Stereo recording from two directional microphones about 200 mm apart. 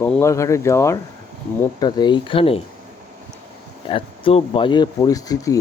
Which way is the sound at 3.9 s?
25° left (ahead or behind).